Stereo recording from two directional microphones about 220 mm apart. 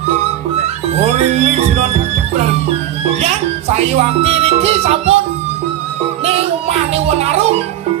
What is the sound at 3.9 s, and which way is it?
Speech, 25° right (ahead or behind).